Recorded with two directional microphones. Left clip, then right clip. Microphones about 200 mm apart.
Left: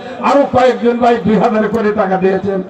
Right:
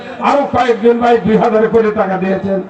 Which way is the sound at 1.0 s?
30° left (ahead or behind).